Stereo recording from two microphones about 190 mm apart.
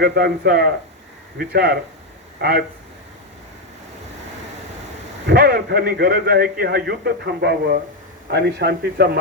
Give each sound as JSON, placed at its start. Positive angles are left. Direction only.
{"t": 0.0, "sound": "a man's voice", "side_deg": -55}
{"t": 5.2, "sound": "a man's voice", "side_deg": -55}